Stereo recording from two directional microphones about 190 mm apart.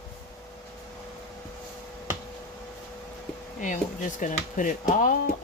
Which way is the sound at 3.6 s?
45° left (ahead or behind).